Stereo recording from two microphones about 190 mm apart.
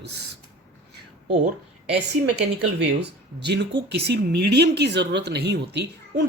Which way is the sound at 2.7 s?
65° right (ahead or behind).